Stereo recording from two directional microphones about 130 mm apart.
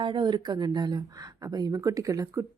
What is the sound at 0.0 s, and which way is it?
A woman's voice, 35° right (ahead or behind).